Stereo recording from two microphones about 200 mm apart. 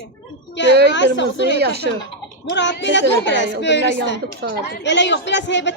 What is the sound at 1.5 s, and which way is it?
Speech, 55° right (ahead or behind).